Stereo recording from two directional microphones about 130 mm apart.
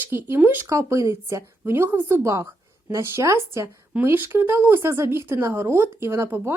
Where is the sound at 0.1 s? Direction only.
15° right (ahead or behind).